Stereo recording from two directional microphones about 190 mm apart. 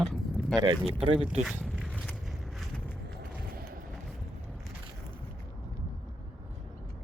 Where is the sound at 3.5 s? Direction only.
50° right (ahead or behind).